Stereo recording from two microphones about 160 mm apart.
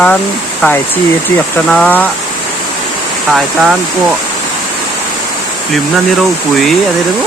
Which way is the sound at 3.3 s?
Centre (ahead or behind).